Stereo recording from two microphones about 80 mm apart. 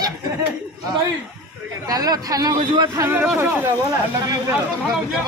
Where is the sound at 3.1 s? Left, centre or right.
Right.